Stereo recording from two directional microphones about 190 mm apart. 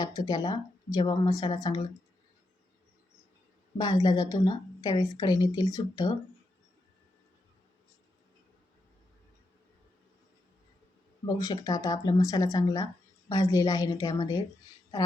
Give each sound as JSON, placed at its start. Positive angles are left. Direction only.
{"t": 0.0, "sound": "speech", "side_deg": 20}
{"t": 3.8, "sound": "speech", "side_deg": 20}
{"t": 11.3, "sound": "speech", "side_deg": 20}